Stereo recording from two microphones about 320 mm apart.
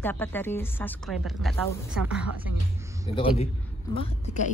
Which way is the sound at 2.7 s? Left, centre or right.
Centre.